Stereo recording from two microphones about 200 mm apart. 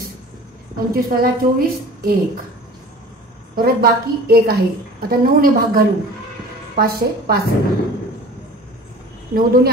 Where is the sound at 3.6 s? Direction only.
50° right (ahead or behind).